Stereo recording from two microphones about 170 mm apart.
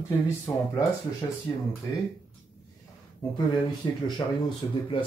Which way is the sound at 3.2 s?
25° left (ahead or behind).